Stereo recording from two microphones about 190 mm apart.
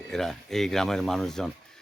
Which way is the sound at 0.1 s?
Centre (ahead or behind).